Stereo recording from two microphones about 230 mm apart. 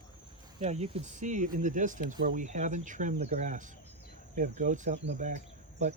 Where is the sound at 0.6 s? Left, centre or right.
Right.